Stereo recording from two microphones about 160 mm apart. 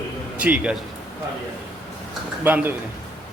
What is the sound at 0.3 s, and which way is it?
Speech, 10° right (ahead or behind).